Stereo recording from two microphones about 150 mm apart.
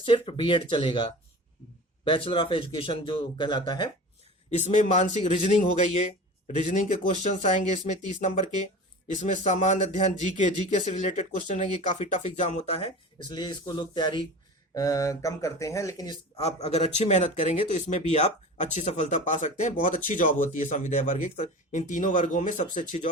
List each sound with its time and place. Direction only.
0.0 s speech: 35° left (ahead or behind)
2.0 s speech: 35° left (ahead or behind)
4.5 s speech: 50° left (ahead or behind)
7.3 s speech: 55° left (ahead or behind); by 16.1 s 20° left (ahead or behind)
16.4 s speech: 45° left (ahead or behind)